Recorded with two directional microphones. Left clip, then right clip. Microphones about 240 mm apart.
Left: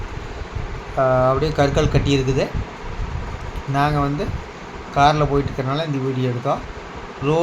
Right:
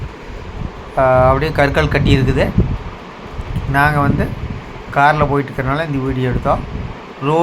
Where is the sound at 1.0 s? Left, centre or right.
Centre.